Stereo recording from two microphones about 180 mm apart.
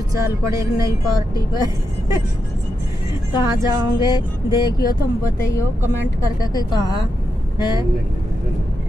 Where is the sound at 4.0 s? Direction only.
25° left (ahead or behind).